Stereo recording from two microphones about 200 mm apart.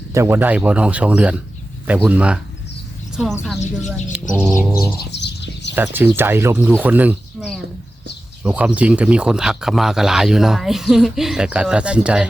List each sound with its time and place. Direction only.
0.1 s speech: 15° right (ahead or behind)
3.8 s speech: 5° right (ahead or behind)
5.2 s a sound: 60° left (ahead or behind)
5.7 s speech: 10° right (ahead or behind)